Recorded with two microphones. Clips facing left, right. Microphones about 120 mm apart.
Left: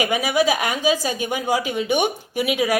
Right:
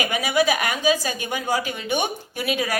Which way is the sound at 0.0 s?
25° left (ahead or behind).